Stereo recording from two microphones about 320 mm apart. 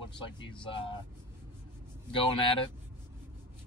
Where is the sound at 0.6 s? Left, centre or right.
Centre.